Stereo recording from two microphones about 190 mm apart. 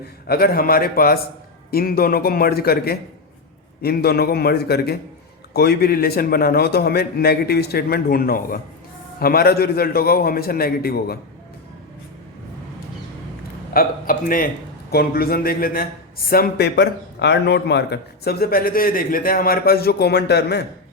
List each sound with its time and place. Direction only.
0.3 s a man's voice: 50° left (ahead or behind)
13.7 s a man's voice: 50° left (ahead or behind)